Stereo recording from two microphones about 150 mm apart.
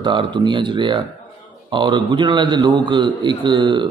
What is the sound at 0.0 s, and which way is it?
A man's voice, 30° right (ahead or behind).